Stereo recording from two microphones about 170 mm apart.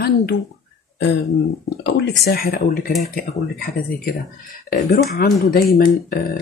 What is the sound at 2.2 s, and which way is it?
Speech, 60° left (ahead or behind).